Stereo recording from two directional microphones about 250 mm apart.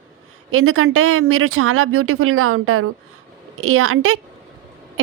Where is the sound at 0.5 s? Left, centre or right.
Right.